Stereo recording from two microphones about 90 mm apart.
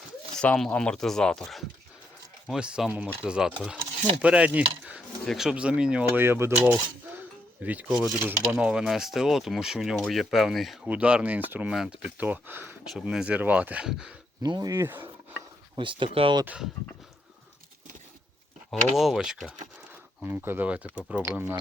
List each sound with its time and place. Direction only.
0.3 s speech: 10° left (ahead or behind)
2.5 s speech: 10° right (ahead or behind)
5.2 s speech: centre (ahead or behind)
6.1 s speech: 25° right (ahead or behind); by 10.8 s centre (ahead or behind)
10.8 s speech: 15° right (ahead or behind)
11.7 s speech: 5° right (ahead or behind)
12.1 s speech: 20° right (ahead or behind)
12.9 s speech: 5° right (ahead or behind)
14.4 s speech: 50° right (ahead or behind)
14.7 s speech: 25° right (ahead or behind)
15.7 s speech: 65° right (ahead or behind)
18.7 s speech: 5° right (ahead or behind)
20.2 s speech: 20° right (ahead or behind)
21.2 s speech: 25° right (ahead or behind)